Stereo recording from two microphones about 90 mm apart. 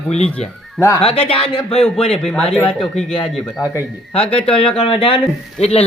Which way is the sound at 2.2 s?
5° left (ahead or behind).